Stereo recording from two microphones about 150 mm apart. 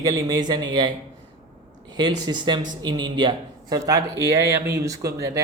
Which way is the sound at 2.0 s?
30° right (ahead or behind).